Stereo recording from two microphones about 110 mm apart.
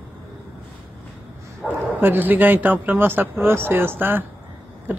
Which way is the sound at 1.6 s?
15° right (ahead or behind).